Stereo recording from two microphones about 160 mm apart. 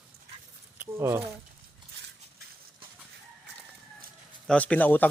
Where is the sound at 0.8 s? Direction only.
15° right (ahead or behind).